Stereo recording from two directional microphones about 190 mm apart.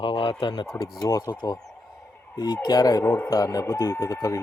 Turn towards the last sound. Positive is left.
turn(degrees=15)  # may be behind; listen again after turning